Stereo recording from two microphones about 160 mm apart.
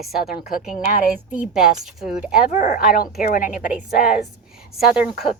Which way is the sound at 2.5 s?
50° left (ahead or behind).